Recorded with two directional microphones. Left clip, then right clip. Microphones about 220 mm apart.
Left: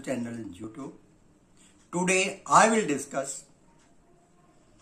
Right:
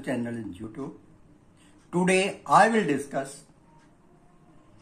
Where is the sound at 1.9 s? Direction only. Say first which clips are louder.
Right 2 dB; 5° left (ahead or behind).